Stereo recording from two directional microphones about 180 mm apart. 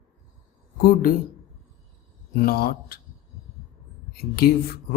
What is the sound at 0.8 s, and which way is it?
Speech, 55° left (ahead or behind).